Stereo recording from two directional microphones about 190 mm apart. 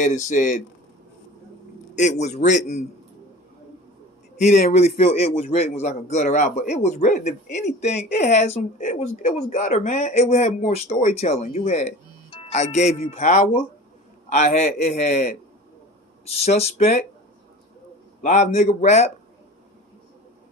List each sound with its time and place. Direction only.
0.0 s a man's voice: 40° left (ahead or behind)
2.0 s a man's voice: 40° left (ahead or behind)
4.4 s a man's voice: 35° left (ahead or behind)
16.4 s a man's voice: 35° left (ahead or behind)
18.2 s a man's voice: 40° left (ahead or behind)